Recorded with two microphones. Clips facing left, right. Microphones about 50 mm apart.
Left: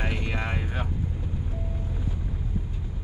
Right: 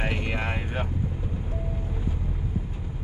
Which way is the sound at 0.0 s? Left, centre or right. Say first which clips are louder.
Right 2 dB; centre.